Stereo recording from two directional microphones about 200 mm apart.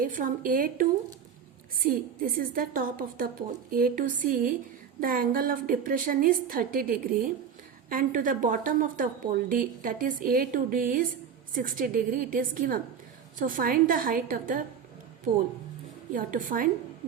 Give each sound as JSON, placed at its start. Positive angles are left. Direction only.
{"t": 0.0, "sound": "a woman's voice", "side_deg": -45}
{"t": 16.1, "sound": "a woman's voice", "side_deg": -45}